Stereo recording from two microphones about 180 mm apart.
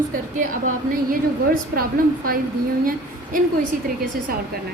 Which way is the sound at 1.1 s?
50° right (ahead or behind).